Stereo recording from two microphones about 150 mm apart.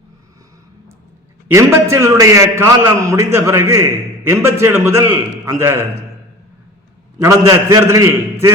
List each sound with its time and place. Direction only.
1.5 s a man's voice: 20° right (ahead or behind)
7.3 s a man's voice: 20° right (ahead or behind)